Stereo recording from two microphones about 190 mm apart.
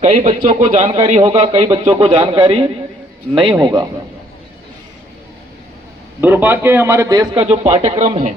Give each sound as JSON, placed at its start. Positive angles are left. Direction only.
{"t": 0.0, "sound": "a man's voice", "side_deg": -35}
{"t": 6.2, "sound": "a man's voice", "side_deg": -10}
{"t": 7.4, "sound": "a man's voice", "side_deg": -35}